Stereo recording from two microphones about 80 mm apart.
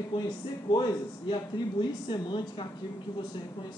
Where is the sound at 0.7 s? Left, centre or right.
Left.